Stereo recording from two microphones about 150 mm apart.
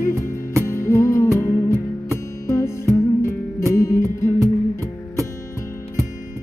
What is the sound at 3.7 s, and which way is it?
Music, 20° left (ahead or behind).